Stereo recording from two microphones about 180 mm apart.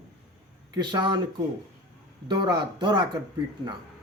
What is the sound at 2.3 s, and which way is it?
Speech, 25° right (ahead or behind).